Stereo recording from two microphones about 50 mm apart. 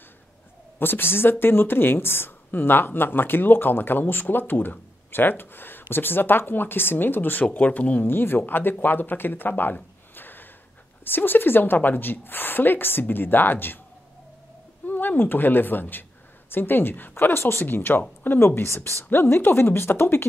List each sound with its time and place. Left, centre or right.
0.7 s speech: left
7.5 s speech: left
8.1 s speech: left
10.1 s gasp: left
11.1 s speech: left
14.9 s a woman's voice: left
18.4 s speech: left
18.8 s speech: left